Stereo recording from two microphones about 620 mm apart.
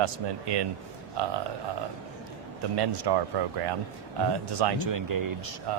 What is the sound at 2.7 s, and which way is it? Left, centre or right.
Speech, right.